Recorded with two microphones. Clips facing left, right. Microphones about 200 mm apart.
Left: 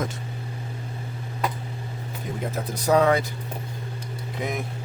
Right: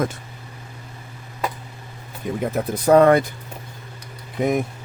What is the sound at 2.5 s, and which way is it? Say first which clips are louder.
Speech: right 6 dB; 55° right (ahead or behind).